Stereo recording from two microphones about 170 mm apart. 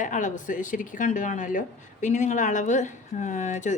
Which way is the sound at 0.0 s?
45° left (ahead or behind).